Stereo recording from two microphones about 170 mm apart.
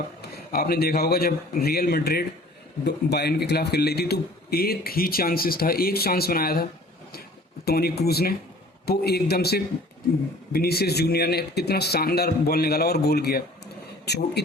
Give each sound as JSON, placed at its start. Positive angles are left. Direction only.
{"t": 0.2, "sound": "speech", "side_deg": 65}